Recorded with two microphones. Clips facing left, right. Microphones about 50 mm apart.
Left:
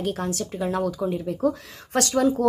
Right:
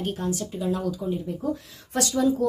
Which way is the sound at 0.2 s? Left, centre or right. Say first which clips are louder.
Even; left.